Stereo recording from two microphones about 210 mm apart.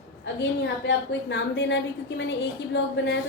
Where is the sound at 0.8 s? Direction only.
55° left (ahead or behind).